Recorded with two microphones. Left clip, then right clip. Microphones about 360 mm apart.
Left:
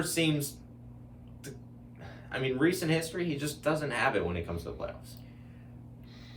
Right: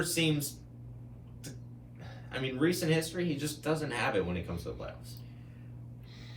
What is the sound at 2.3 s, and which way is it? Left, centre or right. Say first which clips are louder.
Speech: left 3 dB; centre.